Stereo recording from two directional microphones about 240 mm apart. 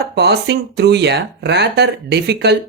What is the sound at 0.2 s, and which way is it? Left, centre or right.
Speech, right.